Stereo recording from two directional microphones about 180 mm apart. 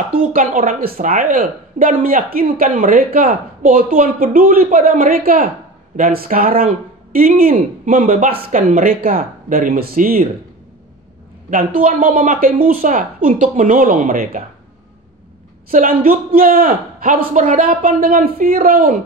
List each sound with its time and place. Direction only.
0.3 s speech: 50° right (ahead or behind)
11.5 s speech: 50° right (ahead or behind)
16.3 s speech: 55° right (ahead or behind)